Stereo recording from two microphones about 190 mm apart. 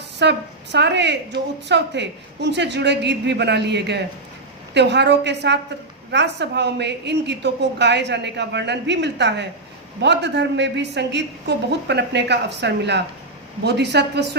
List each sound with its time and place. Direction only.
0.2 s a woman's voice: 65° right (ahead or behind)